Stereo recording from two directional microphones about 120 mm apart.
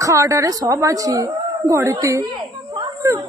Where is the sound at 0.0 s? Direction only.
25° right (ahead or behind).